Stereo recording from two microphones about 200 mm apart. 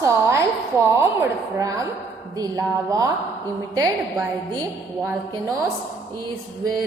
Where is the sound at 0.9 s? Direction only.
15° right (ahead or behind).